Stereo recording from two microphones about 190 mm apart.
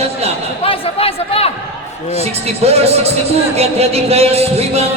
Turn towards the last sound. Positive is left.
turn(degrees=-35)  # may be behind; listen again after turning